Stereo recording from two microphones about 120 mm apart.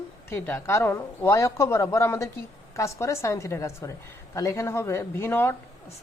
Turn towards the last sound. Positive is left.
turn(degrees=20)  # may be behind; listen again after turning